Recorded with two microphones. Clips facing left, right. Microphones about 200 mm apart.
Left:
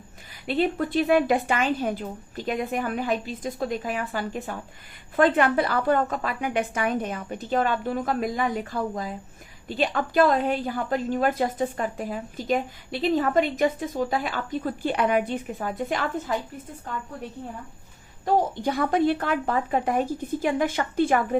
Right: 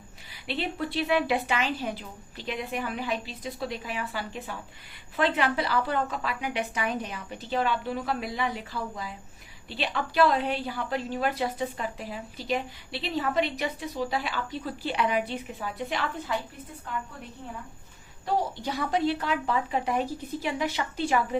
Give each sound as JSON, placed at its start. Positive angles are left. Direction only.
{"t": 0.4, "sound": "a woman's voice", "side_deg": 45}
{"t": 18.3, "sound": "a woman's voice", "side_deg": 50}